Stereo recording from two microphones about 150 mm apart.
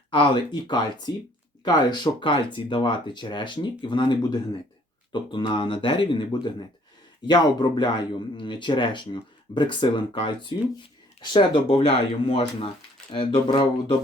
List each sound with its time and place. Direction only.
0.1 s speech: 35° left (ahead or behind)